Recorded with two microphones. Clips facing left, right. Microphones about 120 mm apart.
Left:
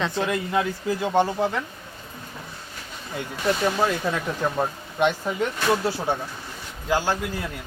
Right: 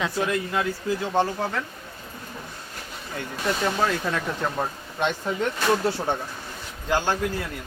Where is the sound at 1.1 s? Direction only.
15° left (ahead or behind).